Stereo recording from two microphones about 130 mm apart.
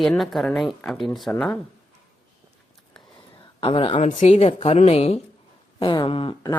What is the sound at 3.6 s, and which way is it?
Speech, 45° left (ahead or behind).